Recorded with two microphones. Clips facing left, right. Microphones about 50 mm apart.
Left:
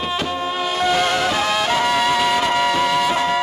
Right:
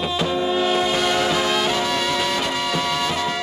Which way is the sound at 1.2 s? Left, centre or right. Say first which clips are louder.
Left 1 dB; centre.